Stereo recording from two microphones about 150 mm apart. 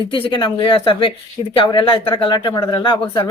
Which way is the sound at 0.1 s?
35° left (ahead or behind).